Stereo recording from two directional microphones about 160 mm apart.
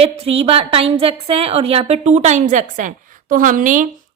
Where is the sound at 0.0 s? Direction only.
40° right (ahead or behind).